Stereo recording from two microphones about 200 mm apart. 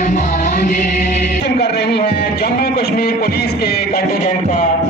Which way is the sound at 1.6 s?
55° left (ahead or behind).